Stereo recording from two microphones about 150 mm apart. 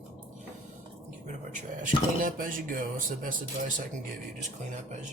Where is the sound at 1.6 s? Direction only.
60° right (ahead or behind).